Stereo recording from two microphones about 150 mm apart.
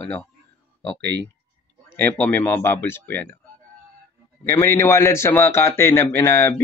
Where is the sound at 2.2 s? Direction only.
15° left (ahead or behind).